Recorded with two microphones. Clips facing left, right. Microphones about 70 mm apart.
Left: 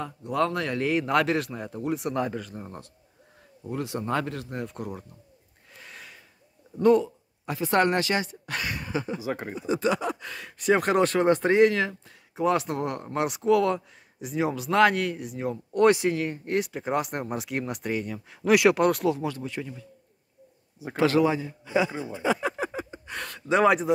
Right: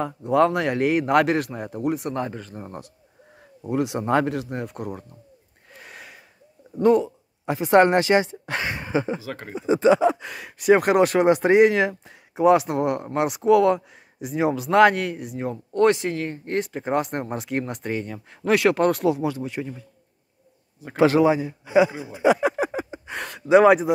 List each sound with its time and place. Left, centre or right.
0.0 s speech: right
3.6 s a sound: centre
4.3 s speech: centre
5.8 s a sound: centre
6.8 s speech: centre
7.4 s speech: right
9.2 s speech: centre
9.6 s a sound: right
10.6 s speech: centre
15.7 s speech: centre
18.5 s speech: centre
20.9 s speech: centre